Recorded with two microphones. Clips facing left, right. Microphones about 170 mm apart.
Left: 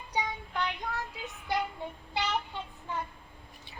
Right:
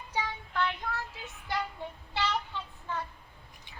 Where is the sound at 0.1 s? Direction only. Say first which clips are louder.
Left 1 dB; 20° left (ahead or behind).